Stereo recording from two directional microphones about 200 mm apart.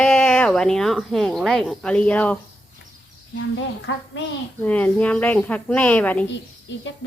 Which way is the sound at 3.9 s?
65° left (ahead or behind).